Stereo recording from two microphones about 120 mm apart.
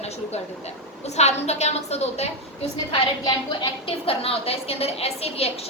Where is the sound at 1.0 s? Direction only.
65° left (ahead or behind).